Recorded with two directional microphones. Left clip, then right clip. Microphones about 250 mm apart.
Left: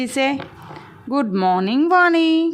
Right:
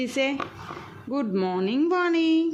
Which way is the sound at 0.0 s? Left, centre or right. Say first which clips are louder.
Left 5 dB; left.